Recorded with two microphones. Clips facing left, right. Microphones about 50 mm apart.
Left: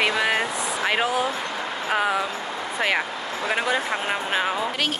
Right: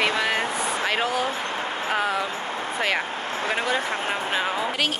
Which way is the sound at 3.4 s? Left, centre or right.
Left.